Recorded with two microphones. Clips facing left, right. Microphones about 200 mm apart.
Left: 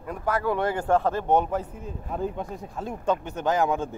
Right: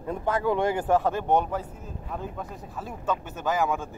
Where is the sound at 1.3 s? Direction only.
5° left (ahead or behind).